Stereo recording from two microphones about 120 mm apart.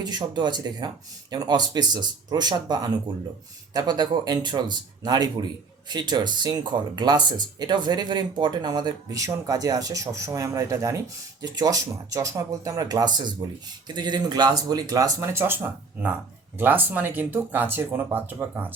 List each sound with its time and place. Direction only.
0.0 s speech: 35° right (ahead or behind); by 18.7 s 15° right (ahead or behind)